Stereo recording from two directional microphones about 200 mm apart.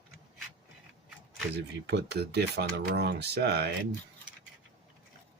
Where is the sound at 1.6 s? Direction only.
60° right (ahead or behind).